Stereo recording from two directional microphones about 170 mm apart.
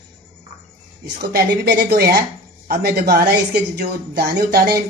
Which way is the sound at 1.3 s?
70° right (ahead or behind).